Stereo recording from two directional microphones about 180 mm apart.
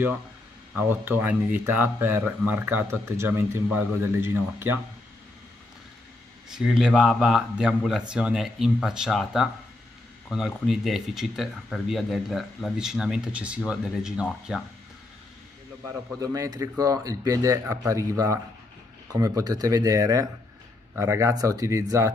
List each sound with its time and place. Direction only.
0.7 s speech: 10° right (ahead or behind)
6.5 s speech: 5° right (ahead or behind)
16.2 s speech: 20° right (ahead or behind)